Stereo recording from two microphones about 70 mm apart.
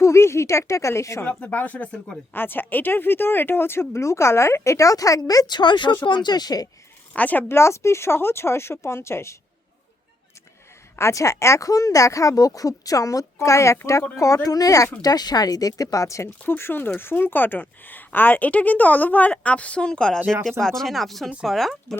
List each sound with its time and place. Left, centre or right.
0.0 s a woman's voice: left
1.2 s speech: left
5.5 s speech: left
7.2 s speech: left
7.4 s speech: left
10.9 s speech: left
15.0 s speech: left
16.5 s speech: left; by 21.7 s centre